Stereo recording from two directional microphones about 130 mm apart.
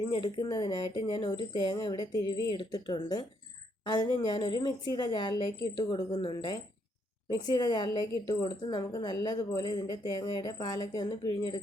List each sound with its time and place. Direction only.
0.3 s a woman's voice: 30° left (ahead or behind)